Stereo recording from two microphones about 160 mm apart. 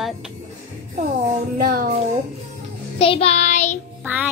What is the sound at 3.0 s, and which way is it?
Child singing, 35° left (ahead or behind).